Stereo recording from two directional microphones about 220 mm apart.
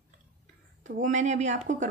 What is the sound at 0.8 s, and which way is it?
Speech, 35° right (ahead or behind).